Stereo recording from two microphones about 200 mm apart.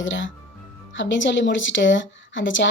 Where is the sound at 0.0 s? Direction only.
70° left (ahead or behind).